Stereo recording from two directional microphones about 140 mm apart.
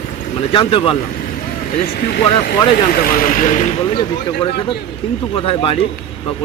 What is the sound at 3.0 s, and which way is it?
Speech, 80° left.